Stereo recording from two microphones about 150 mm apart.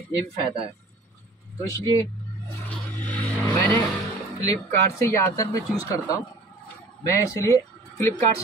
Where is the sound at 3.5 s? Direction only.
20° left (ahead or behind).